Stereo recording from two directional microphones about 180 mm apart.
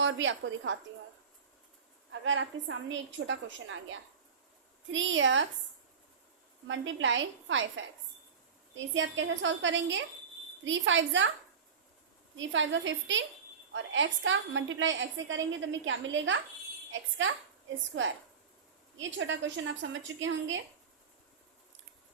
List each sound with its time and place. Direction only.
0.0 s a woman's voice: 90° right
2.0 s a woman's voice: 90° right
6.7 s a woman's voice: 90° right
12.4 s a woman's voice: 90° right
18.9 s a woman's voice: 90° right